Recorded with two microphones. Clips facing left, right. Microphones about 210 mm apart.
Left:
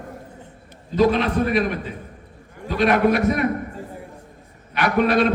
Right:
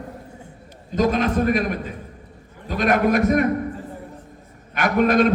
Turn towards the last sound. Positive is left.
turn(degrees=-45)  # may be behind; listen again after turning